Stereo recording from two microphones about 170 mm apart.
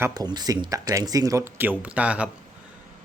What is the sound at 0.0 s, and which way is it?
Speech, 25° right (ahead or behind).